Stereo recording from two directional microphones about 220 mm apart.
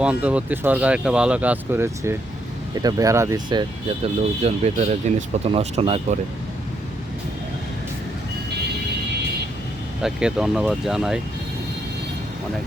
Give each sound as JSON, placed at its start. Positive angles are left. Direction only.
{"t": 0.0, "sound": "speech", "side_deg": -5}
{"t": 10.0, "sound": "speech", "side_deg": -5}